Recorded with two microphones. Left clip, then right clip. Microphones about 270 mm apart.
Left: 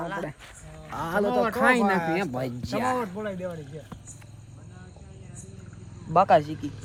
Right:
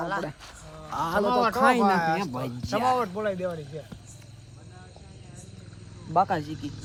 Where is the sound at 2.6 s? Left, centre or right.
Right.